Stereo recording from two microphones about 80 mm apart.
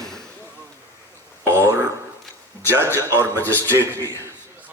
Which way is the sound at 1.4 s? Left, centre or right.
Right.